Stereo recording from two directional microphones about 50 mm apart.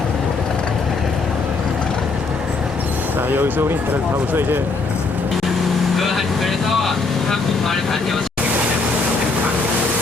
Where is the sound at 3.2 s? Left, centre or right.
Right.